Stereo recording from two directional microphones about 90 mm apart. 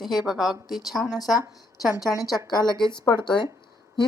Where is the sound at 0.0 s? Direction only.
Centre (ahead or behind).